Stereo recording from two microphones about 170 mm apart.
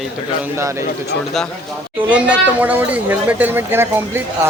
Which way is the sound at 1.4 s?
Centre (ahead or behind).